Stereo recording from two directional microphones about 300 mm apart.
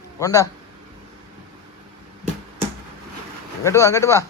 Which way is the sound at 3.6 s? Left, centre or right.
Centre.